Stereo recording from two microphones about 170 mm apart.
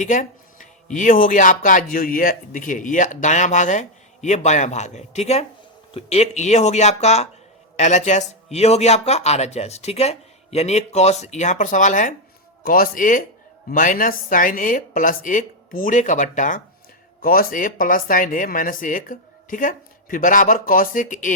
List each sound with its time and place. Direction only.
0.0 s speech: 50° left (ahead or behind)
17.2 s speech: 60° left (ahead or behind)